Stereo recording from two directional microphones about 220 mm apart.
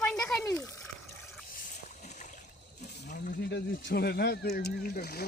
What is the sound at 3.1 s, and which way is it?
Speech, 45° left (ahead or behind).